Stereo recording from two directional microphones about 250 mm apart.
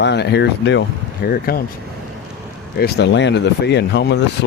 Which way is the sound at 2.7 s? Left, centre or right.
Left.